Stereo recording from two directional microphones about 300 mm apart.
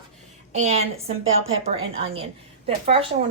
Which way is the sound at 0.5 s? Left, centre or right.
Right.